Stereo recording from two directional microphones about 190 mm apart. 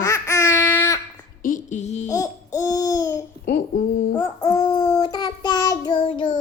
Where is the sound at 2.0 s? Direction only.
15° left (ahead or behind).